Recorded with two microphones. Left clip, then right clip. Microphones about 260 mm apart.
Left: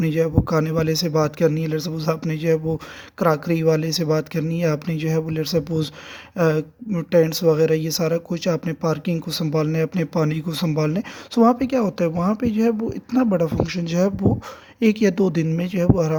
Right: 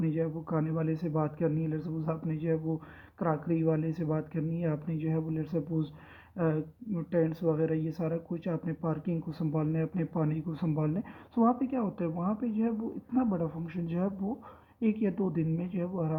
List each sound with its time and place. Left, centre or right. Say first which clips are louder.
0.0 s speech: left 12 dB; left